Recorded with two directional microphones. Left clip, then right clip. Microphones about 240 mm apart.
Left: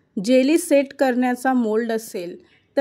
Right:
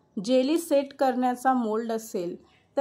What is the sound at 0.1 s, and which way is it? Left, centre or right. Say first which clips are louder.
A woman's voice: left 7 dB; left.